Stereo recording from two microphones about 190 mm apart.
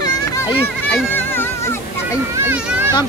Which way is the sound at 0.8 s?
10° left (ahead or behind).